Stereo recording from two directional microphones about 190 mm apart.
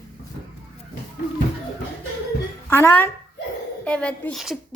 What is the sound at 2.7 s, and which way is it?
A woman's voice, 10° left (ahead or behind).